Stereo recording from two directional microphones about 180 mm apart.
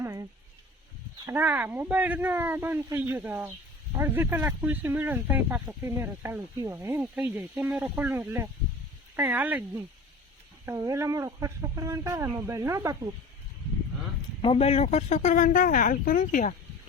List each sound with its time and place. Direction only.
0.0 s a sound: 15° right (ahead or behind)
1.3 s speech: 10° right (ahead or behind)
14.4 s speech: 30° left (ahead or behind)